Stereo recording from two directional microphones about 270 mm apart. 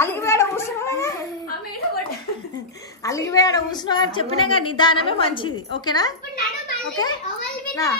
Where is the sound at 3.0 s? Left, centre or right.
Centre.